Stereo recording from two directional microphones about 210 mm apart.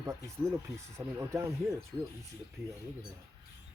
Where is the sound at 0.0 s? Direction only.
15° right (ahead or behind).